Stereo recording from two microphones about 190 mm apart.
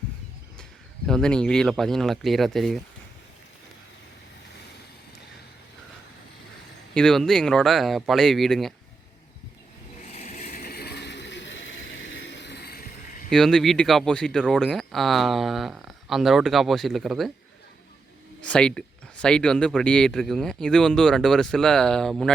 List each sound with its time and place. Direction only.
1.0 s speech: 5° left (ahead or behind)
6.9 s speech: 5° left (ahead or behind)
10.1 s a sound: 35° left (ahead or behind); by 13.2 s 55° left (ahead or behind)
13.3 s speech: 5° left (ahead or behind)
18.4 s speech: 5° left (ahead or behind)